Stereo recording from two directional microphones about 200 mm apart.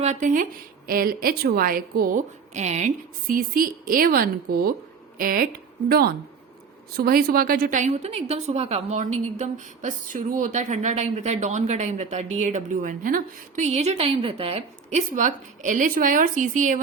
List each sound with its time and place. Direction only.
0.0 s a woman's voice: 40° right (ahead or behind)
6.9 s a woman's voice: 50° right (ahead or behind)